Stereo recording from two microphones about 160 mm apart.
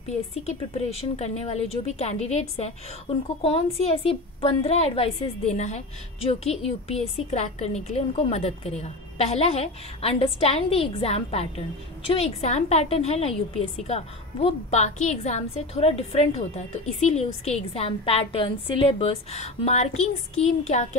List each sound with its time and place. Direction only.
0.4 s a woman's voice: 45° left (ahead or behind)